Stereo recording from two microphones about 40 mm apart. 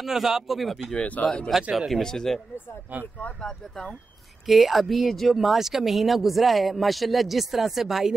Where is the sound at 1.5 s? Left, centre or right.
Centre.